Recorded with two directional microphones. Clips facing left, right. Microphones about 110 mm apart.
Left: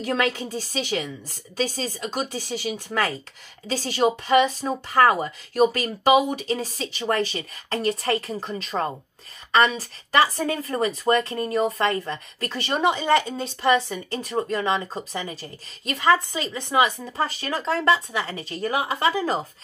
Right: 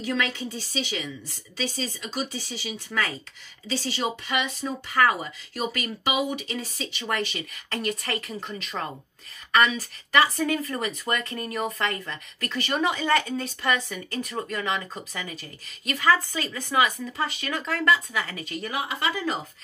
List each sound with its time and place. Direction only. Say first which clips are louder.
0.0 s a woman's voice: left 4 dB; 40° left (ahead or behind)